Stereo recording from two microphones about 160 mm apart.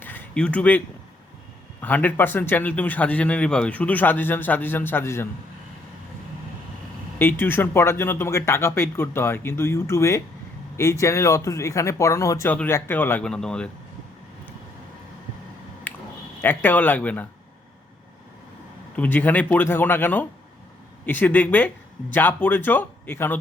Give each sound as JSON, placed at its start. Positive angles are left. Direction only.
{"t": 0.0, "sound": "a sound", "side_deg": 10}
{"t": 1.8, "sound": "speech", "side_deg": 10}
{"t": 7.2, "sound": "speech", "side_deg": 15}
{"t": 15.9, "sound": "a sound", "side_deg": 10}
{"t": 16.4, "sound": "speech", "side_deg": 10}
{"t": 18.9, "sound": "speech", "side_deg": 10}